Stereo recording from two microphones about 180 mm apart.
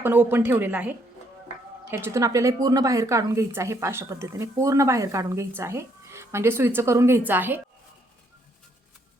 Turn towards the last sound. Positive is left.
turn(degrees=-10)  # may be behind; listen again after turning